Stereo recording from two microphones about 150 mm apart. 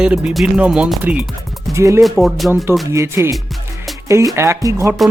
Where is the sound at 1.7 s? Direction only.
20° right (ahead or behind).